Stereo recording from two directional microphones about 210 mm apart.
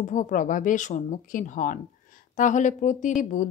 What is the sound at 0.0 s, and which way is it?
Speech, 35° left (ahead or behind).